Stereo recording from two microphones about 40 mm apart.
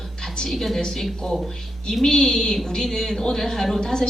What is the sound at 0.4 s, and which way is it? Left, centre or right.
A woman's voice, centre.